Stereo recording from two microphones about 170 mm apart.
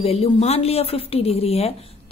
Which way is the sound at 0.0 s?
35° left (ahead or behind).